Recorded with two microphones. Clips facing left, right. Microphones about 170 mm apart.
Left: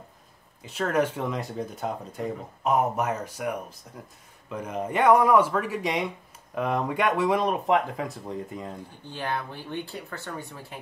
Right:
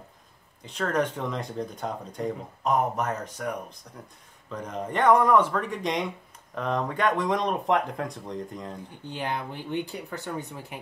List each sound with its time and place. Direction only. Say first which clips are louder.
0.6 s speech: left 2 dB; 5° left (ahead or behind)
9.1 s speech: even; 20° right (ahead or behind)